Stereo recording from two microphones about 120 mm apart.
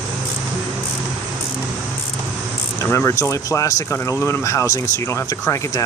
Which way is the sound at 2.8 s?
20° left (ahead or behind).